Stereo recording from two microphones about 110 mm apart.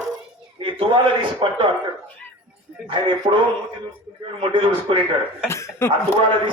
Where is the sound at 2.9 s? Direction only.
50° right (ahead or behind).